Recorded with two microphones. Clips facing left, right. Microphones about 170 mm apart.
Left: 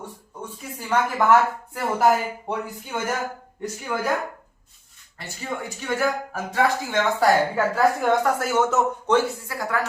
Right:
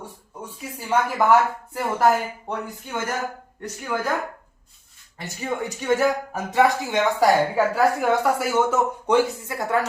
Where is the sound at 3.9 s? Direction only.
Centre (ahead or behind).